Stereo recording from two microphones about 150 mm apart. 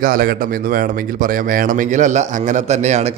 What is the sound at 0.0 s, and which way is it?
Speech, 75° right (ahead or behind).